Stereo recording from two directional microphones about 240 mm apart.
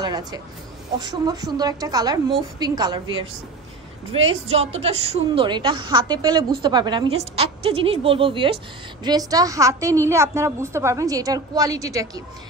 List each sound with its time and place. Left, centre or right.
0.0 s a woman's voice: centre
4.5 s a woman's voice: right